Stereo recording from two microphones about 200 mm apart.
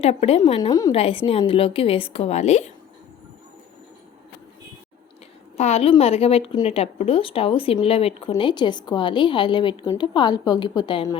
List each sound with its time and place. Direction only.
0.0 s speech: 30° left (ahead or behind)
0.7 s a woman's voice: 20° left (ahead or behind)
0.9 s a woman's voice: 30° left (ahead or behind)
5.5 s a woman's voice: 35° left (ahead or behind)